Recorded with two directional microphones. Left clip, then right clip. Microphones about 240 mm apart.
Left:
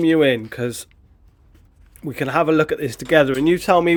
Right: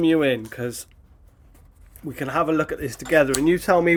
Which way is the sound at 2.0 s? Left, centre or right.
Left.